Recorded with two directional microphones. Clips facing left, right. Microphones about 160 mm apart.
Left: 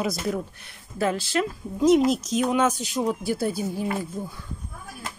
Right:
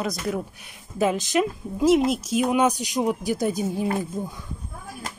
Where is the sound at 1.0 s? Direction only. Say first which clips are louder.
Right 3 dB; 15° right (ahead or behind).